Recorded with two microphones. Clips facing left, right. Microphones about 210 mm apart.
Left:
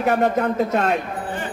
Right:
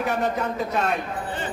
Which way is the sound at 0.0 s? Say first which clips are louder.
Left 6 dB; 55° left (ahead or behind).